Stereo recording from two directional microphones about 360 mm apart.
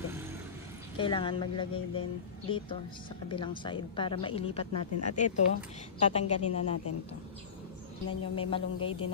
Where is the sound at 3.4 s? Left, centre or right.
Centre.